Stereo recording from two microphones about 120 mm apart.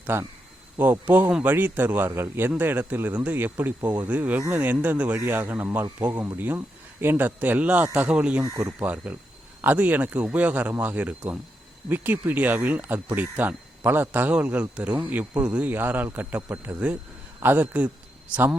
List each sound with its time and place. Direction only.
0.0 s speech: 20° right (ahead or behind)
8.4 s speech: 25° right (ahead or behind)
8.8 s speech: 15° right (ahead or behind)